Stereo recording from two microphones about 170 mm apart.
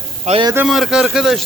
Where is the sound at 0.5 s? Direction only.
5° right (ahead or behind).